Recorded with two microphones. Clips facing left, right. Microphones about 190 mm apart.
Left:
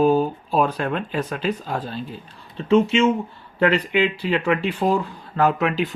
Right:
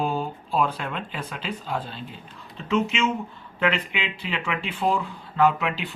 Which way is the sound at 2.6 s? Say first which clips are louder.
Left 7 dB; 30° left (ahead or behind).